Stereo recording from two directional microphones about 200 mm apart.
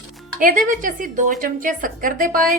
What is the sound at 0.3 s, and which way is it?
A woman's voice, 40° right (ahead or behind).